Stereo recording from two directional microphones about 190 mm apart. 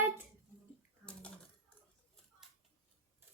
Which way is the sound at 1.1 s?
5° left (ahead or behind).